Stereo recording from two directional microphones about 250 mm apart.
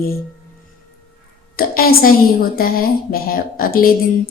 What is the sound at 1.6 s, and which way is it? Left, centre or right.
Speech, left.